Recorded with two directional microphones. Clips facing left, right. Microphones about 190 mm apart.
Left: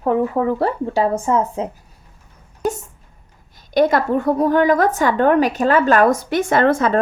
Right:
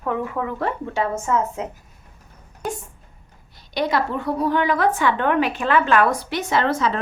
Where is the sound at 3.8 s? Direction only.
50° left (ahead or behind).